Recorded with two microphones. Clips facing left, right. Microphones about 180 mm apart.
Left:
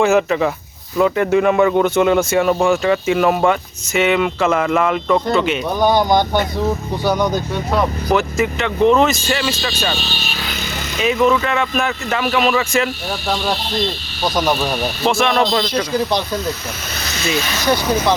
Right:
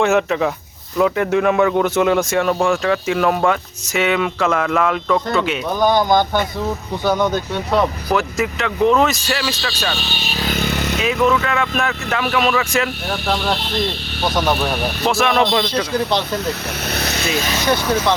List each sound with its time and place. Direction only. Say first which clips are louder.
0.0 s a man's voice: left 2 dB; centre (ahead or behind)
5.9 s speech: even; 20° left (ahead or behind)
7.8 s a man's voice: left 1 dB; centre (ahead or behind)
10.4 s vehicle: right 10 dB; 55° right (ahead or behind)
11.0 s a man's voice: left 3 dB; centre (ahead or behind)
16.5 s speech: right 2 dB; 60° right (ahead or behind)
17.7 s speech: left 2 dB; 15° left (ahead or behind)